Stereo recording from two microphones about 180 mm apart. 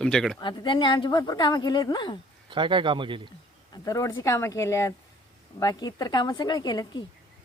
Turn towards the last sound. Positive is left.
turn(degrees=25)  # may be behind; listen again after turning